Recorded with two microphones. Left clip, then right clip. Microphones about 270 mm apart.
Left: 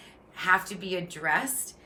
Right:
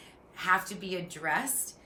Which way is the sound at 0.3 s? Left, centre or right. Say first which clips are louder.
Left 3 dB; centre.